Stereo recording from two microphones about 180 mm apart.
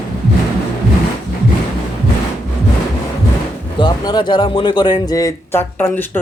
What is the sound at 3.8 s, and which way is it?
Speech, 25° left (ahead or behind).